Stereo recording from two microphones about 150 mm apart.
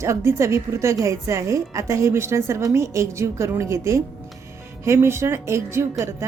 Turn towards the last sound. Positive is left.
turn(degrees=-20)  # may be behind; listen again after turning